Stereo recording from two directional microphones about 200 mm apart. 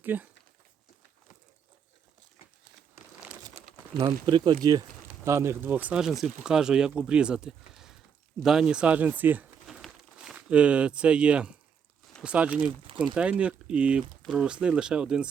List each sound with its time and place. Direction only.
0.0 s speech: 10° right (ahead or behind)
2.9 s crumpling: 5° right (ahead or behind)
4.0 s speech: 25° right (ahead or behind); by 15.3 s 5° right (ahead or behind)